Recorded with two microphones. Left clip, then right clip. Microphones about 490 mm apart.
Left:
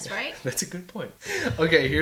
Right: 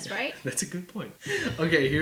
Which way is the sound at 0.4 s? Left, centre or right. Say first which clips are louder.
Left 3 dB; left.